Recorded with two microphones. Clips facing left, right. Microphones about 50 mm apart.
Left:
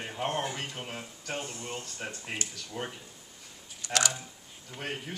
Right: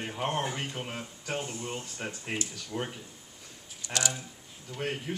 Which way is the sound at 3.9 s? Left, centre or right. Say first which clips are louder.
Left 3 dB; left.